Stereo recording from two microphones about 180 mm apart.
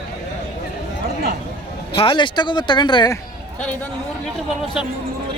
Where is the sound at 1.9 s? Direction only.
30° left (ahead or behind).